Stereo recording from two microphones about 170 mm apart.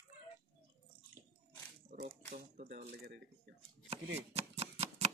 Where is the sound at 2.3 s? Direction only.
50° right (ahead or behind).